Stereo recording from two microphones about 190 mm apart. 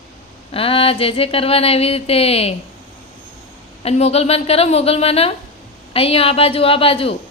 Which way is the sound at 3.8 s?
35° left (ahead or behind).